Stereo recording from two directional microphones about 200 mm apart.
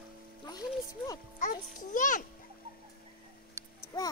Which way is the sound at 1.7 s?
40° left (ahead or behind).